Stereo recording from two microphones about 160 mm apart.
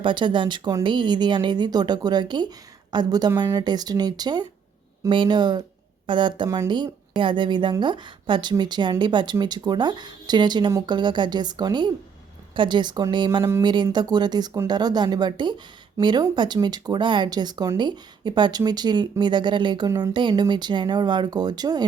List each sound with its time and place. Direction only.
0.0 s speech: 30° right (ahead or behind)